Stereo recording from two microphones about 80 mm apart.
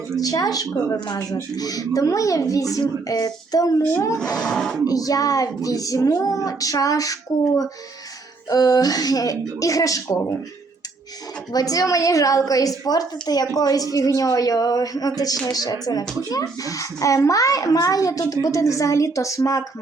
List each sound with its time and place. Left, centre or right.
0.2 s a child's voice: left
0.9 s a child's voice: left
3.9 s a woman's voice: left
4.2 s speech: centre
4.9 s a child's voice: left
11.5 s a child's voice: left